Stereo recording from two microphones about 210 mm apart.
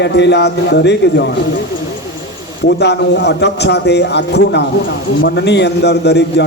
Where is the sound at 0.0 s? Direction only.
55° left (ahead or behind).